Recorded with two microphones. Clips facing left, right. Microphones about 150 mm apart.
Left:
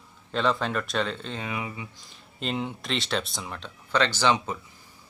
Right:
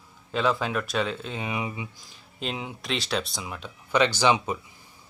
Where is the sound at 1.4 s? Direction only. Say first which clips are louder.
Right 2 dB; 20° right (ahead or behind).